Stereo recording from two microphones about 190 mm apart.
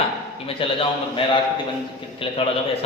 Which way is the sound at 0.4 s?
30° left (ahead or behind).